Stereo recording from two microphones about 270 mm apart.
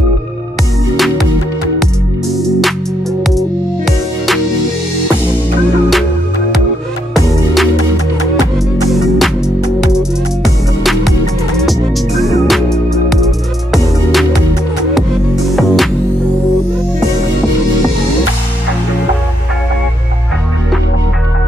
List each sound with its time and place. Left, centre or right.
0.9 s music: centre
3.3 s music: centre
8.9 s music: centre
15.5 s music: centre